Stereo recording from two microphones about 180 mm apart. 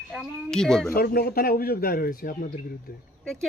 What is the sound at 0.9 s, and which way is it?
A man's voice, 55° left (ahead or behind).